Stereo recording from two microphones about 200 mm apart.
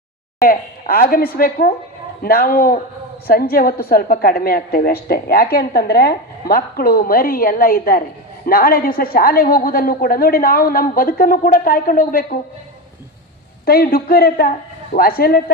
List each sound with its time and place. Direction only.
0.4 s a woman's voice: 45° left (ahead or behind)
13.7 s a woman's voice: 50° left (ahead or behind)